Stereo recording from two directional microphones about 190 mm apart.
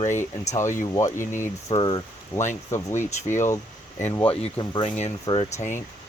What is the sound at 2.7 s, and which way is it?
Speech, 15° left (ahead or behind).